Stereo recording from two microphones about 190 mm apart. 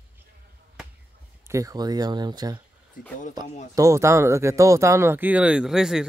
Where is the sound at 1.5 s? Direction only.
15° right (ahead or behind).